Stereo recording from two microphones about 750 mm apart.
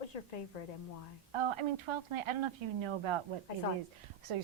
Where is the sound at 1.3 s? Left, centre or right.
Right.